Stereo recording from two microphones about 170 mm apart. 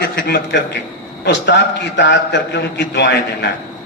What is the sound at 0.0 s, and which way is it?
Speech, 75° left (ahead or behind).